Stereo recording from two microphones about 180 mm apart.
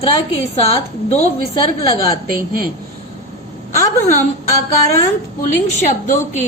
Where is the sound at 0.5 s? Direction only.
35° left (ahead or behind).